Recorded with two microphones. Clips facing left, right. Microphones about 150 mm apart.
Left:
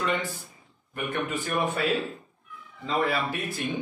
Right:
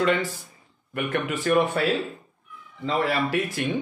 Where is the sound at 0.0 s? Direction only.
90° right.